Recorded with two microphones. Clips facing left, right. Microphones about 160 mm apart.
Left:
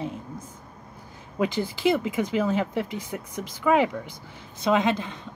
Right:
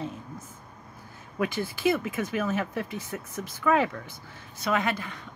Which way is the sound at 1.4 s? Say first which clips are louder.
Left 3 dB; 20° left (ahead or behind).